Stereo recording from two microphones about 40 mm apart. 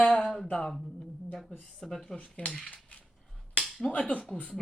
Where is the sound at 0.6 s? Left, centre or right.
Centre.